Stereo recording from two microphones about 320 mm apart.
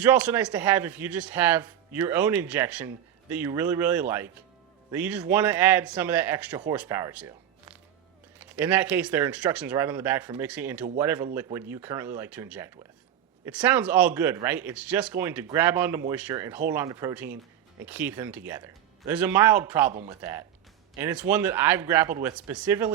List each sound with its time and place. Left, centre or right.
0.0 s speech: centre
8.4 s speech: centre
19.9 s speech: centre
20.9 s speech: centre